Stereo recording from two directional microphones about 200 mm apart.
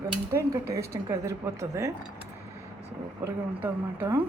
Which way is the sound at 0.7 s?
15° right (ahead or behind).